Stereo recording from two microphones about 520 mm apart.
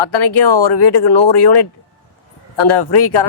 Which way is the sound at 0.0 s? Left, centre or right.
Left.